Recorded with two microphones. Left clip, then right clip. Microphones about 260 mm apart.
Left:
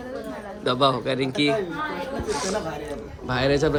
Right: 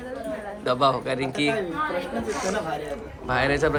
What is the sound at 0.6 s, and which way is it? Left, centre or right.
Speech, centre.